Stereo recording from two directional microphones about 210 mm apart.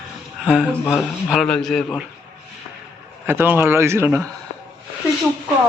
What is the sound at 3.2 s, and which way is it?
A man's voice, 10° right (ahead or behind).